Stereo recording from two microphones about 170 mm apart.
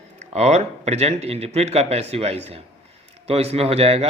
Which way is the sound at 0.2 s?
40° right (ahead or behind).